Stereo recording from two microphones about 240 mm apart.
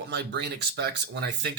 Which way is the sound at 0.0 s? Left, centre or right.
Right.